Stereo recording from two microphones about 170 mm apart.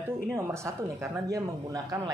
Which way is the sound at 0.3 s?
15° right (ahead or behind).